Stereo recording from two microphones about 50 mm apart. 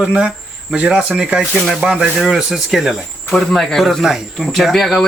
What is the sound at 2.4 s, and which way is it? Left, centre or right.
Speech, centre.